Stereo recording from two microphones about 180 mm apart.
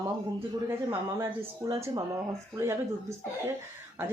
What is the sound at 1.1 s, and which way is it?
Speech, 15° right (ahead or behind).